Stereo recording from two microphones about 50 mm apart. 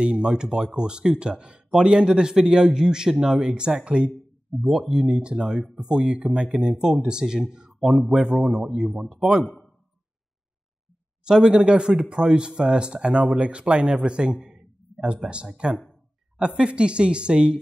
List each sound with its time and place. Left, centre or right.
0.0 s speech: centre
4.6 s speech: centre; by 6.7 s right
6.7 s speech: centre
7.8 s speech: centre
8.1 s speech: centre
11.2 s speech: centre
14.4 s a sound: centre
15.2 s speech: right